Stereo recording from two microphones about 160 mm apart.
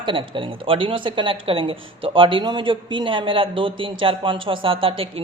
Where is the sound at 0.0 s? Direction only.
30° right (ahead or behind).